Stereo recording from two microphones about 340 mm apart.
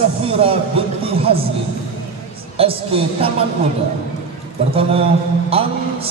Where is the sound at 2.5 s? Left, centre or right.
Centre.